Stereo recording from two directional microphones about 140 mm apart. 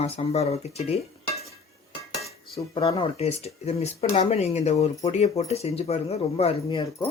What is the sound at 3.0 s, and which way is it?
Speech, 45° left (ahead or behind).